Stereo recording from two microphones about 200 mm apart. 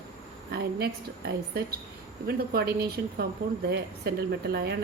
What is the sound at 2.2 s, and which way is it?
A woman's voice, 50° right (ahead or behind).